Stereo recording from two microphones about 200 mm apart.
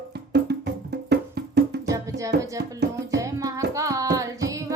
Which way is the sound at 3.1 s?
15° right (ahead or behind).